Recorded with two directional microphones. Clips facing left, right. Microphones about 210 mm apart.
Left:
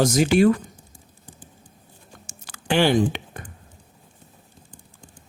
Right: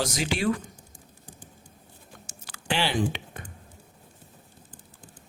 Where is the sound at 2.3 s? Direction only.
50° left (ahead or behind).